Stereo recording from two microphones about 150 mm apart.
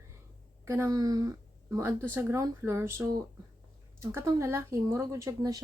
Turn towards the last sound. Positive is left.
turn(degrees=-25)  # may be behind; listen again after turning